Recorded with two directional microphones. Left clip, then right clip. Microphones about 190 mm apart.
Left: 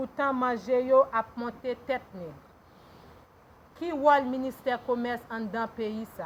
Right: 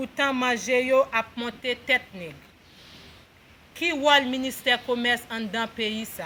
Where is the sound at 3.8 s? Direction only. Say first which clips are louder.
Right 3 dB; 15° right (ahead or behind).